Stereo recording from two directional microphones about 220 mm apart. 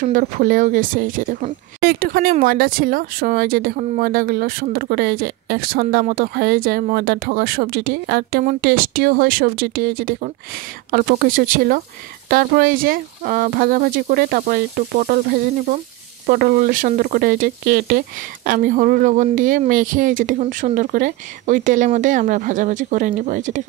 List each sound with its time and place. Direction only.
0.0 s speech: 40° right (ahead or behind)